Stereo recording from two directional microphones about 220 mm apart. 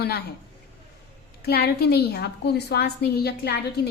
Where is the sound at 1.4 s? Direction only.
45° left (ahead or behind).